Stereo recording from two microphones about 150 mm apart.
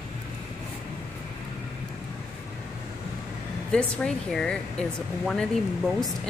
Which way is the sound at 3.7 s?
5° left (ahead or behind).